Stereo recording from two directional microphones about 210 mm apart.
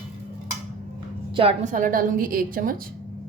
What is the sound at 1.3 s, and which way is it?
Speech, 25° right (ahead or behind).